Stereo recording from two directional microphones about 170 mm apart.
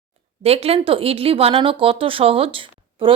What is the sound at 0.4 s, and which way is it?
A woman's voice, 35° right (ahead or behind).